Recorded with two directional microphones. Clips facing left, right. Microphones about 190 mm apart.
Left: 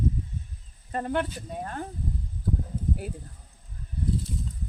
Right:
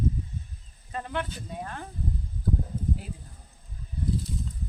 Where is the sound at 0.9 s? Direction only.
45° left (ahead or behind).